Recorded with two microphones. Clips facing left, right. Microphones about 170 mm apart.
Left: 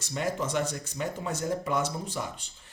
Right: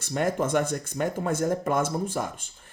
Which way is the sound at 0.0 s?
55° right (ahead or behind).